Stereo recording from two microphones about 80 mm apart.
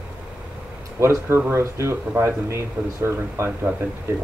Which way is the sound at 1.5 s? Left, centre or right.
Right.